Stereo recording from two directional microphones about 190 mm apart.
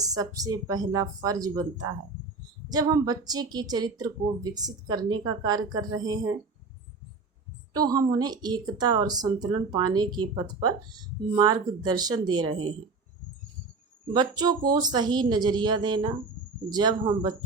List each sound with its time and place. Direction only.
0.0 s speech: 20° right (ahead or behind)
7.7 s speech: 20° right (ahead or behind)
14.1 s speech: 20° right (ahead or behind)